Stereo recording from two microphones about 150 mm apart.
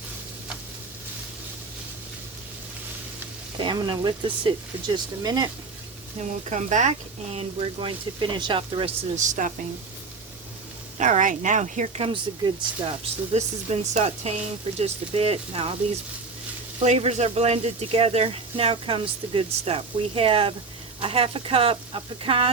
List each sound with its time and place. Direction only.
3.6 s speech: 30° right (ahead or behind)
6.1 s speech: 50° right (ahead or behind)
7.3 s speech: 40° right (ahead or behind); by 9.5 s 55° right (ahead or behind)
10.9 s speech: 55° right (ahead or behind)
12.0 s speech: 35° right (ahead or behind)
13.3 s speech: 45° right (ahead or behind)
16.8 s speech: 45° right (ahead or behind)